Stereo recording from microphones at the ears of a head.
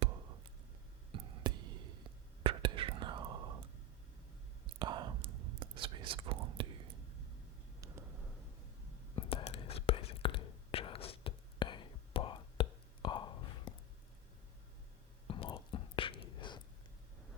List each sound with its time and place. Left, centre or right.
0.0 s a sound: right
1.1 s whispering: right
9.1 s whispering: left
15.3 s whispering: left